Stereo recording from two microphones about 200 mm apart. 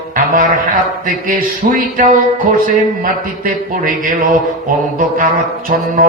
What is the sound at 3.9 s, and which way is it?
Speech, 40° right (ahead or behind).